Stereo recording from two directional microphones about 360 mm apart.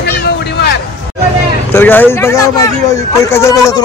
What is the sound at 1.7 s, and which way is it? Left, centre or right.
Speech, centre.